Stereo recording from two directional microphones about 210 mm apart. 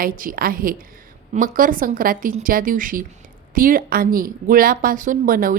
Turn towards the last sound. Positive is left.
turn(degrees=-40)  # may be behind; listen again after turning